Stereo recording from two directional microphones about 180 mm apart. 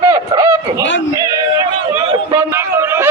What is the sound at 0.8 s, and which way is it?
Speech, 90° left.